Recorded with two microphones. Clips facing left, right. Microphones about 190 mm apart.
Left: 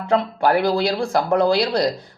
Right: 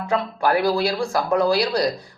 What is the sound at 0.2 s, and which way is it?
Speech, 25° left (ahead or behind).